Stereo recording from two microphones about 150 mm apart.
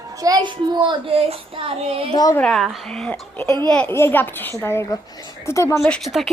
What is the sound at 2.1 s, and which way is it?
Speech, 25° left (ahead or behind).